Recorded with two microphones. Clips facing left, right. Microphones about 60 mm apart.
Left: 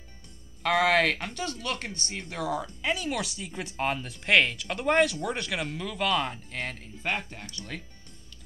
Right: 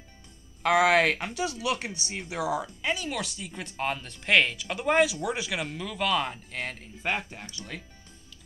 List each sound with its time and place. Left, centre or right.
0.6 s speech: centre